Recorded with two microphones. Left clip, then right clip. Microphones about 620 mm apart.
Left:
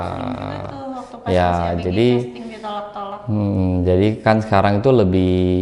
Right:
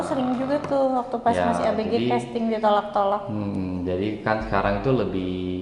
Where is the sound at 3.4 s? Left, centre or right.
Left.